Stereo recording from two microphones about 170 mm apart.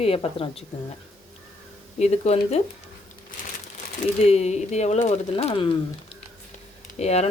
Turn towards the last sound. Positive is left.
turn(degrees=40)  # may be behind; listen again after turning